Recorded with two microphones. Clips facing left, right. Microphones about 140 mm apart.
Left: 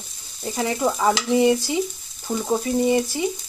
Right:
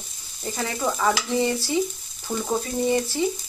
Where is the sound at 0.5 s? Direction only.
15° left (ahead or behind).